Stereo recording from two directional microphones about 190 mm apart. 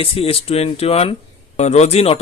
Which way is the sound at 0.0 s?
30° left (ahead or behind).